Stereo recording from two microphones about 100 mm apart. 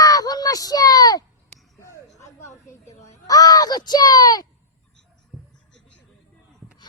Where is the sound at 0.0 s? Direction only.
40° left (ahead or behind).